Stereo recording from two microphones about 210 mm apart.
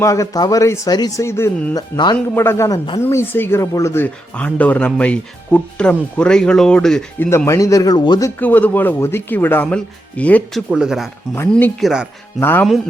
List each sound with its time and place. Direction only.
0.0 s speech: 15° left (ahead or behind)
8.4 s speech: 10° left (ahead or behind)
12.4 s speech: 10° left (ahead or behind)